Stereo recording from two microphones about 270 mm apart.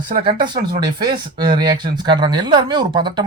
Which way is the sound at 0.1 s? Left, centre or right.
Centre.